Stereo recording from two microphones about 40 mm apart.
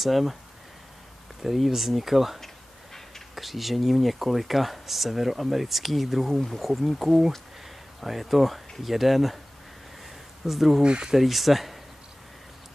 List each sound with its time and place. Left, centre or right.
0.0 s speech: centre
1.4 s speech: centre
10.4 s speech: centre
10.8 s speech: right
11.1 s speech: centre